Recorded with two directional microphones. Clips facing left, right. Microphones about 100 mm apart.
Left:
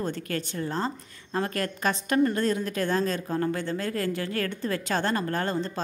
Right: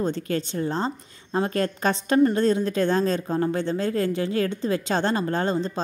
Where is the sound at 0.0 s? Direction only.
25° right (ahead or behind).